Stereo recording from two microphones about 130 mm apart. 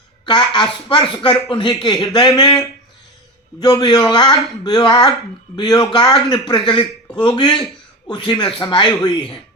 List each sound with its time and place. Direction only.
0.3 s speech: 35° left (ahead or behind)
3.6 s speech: 30° left (ahead or behind)